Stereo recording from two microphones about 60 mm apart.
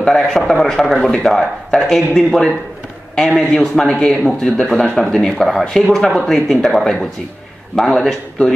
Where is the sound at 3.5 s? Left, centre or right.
Centre.